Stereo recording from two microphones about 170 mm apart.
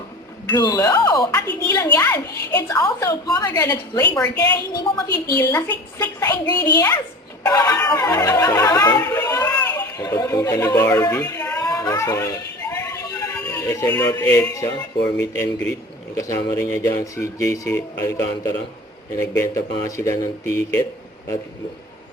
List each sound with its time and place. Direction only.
0.6 s a woman's voice: 20° left (ahead or behind)
11.3 s a sound: 15° left (ahead or behind)
14.0 s speech: 20° left (ahead or behind)
16.1 s speech: 20° left (ahead or behind)